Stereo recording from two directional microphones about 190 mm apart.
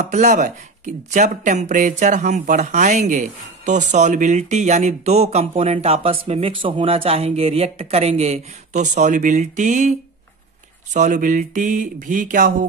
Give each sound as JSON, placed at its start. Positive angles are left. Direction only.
{"t": 0.1, "sound": "speech", "side_deg": -40}